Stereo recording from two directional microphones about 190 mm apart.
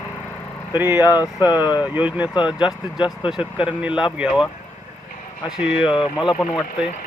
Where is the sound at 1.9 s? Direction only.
10° right (ahead or behind).